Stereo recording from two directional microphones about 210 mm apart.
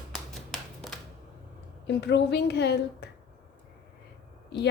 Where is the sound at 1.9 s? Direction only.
55° left (ahead or behind).